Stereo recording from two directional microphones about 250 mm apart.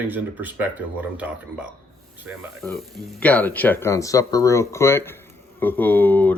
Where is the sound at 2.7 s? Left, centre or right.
Centre.